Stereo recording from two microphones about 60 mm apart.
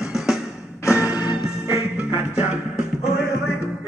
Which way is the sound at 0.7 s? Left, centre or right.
Left.